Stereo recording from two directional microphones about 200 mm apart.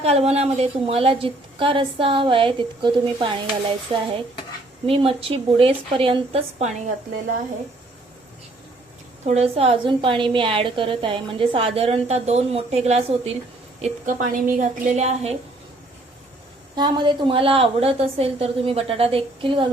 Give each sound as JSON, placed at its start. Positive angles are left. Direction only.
{"t": 0.0, "sound": "a woman's voice", "side_deg": -30}
{"t": 9.2, "sound": "a woman's voice", "side_deg": -30}
{"t": 13.8, "sound": "a woman's voice", "side_deg": -40}
{"t": 16.7, "sound": "a woman's voice", "side_deg": -20}